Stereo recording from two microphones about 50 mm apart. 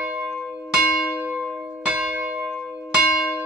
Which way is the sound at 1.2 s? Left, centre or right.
Right.